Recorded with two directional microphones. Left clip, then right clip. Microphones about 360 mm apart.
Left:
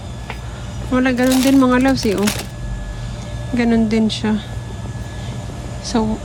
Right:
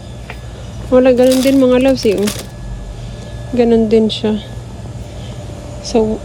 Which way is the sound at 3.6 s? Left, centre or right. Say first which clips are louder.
Right 7 dB; centre.